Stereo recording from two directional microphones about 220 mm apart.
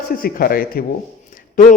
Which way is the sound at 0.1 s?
40° left (ahead or behind).